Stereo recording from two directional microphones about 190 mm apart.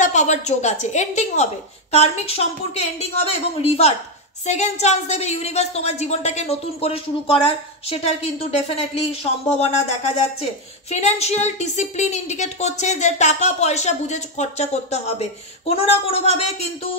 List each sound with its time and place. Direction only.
0.0 s a woman's voice: 40° left (ahead or behind)